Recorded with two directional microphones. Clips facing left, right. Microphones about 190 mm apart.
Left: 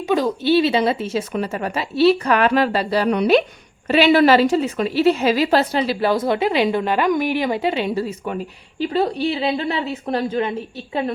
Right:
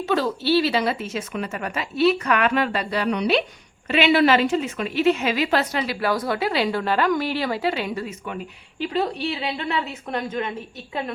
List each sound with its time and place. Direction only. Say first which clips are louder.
0.0 s speech: left 4 dB; 15° left (ahead or behind); by 3.2 s 35° left (ahead or behind)
3.2 s a woman's voice: left 6 dB; 45° left (ahead or behind)